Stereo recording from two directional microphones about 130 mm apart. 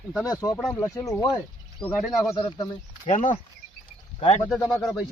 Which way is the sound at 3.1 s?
75° left (ahead or behind).